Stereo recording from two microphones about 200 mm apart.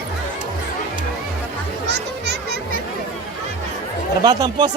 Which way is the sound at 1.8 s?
55° right (ahead or behind).